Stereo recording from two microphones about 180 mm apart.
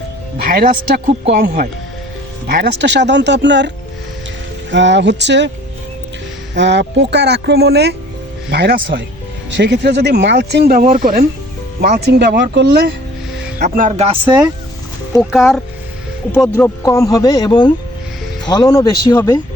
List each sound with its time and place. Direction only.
0.4 s speech: 50° right (ahead or behind)
2.6 s speech: 70° right (ahead or behind)
4.7 s speech: 85° right
6.5 s speech: 75° right (ahead or behind); by 9.0 s 55° right (ahead or behind)
9.5 s speech: 70° right (ahead or behind); by 11.3 s 55° right (ahead or behind)
11.8 s speech: 65° right (ahead or behind)
13.6 s speech: 45° right (ahead or behind); by 14.4 s 30° right (ahead or behind)
15.2 s speech: centre (ahead or behind); by 19.4 s 20° left (ahead or behind)